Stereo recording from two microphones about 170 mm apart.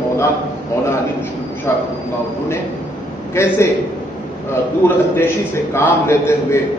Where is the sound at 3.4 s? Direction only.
15° left (ahead or behind).